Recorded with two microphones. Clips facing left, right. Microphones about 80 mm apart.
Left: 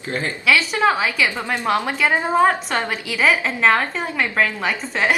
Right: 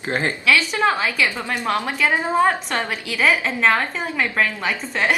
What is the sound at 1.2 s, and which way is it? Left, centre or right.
Speech, centre.